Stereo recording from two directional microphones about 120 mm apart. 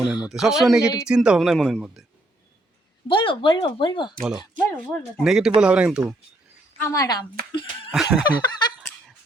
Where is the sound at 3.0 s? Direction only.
45° left (ahead or behind).